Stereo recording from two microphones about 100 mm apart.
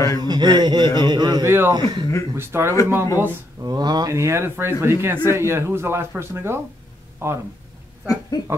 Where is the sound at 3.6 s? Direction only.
40° right (ahead or behind); by 7.4 s 25° right (ahead or behind).